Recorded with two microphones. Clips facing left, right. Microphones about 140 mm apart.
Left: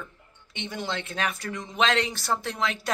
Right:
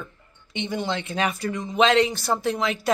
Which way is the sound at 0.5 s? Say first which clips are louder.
Right 5 dB; centre (ahead or behind).